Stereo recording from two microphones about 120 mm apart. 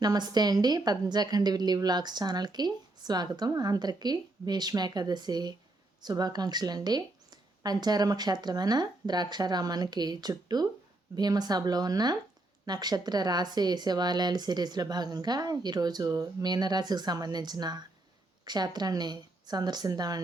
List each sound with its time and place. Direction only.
0.0 s a woman's voice: 35° right (ahead or behind)